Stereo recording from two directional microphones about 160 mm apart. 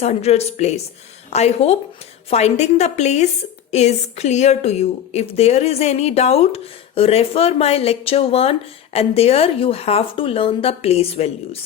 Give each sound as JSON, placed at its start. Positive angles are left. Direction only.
{"t": 0.0, "sound": "a woman's voice", "side_deg": 40}